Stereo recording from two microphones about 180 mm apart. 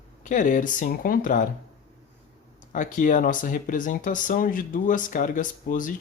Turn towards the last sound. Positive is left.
turn(degrees=50)  # may be behind; listen again after turning